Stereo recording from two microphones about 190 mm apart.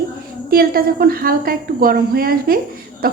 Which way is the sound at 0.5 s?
50° right (ahead or behind).